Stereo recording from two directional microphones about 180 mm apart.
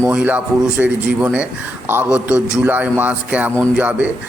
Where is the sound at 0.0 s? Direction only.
10° right (ahead or behind).